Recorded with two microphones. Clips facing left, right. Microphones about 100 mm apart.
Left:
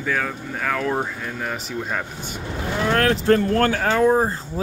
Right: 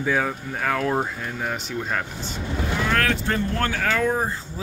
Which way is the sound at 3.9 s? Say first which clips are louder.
Left 5 dB; 30° left (ahead or behind).